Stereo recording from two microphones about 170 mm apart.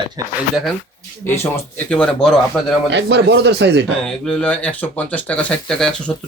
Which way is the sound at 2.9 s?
80° right.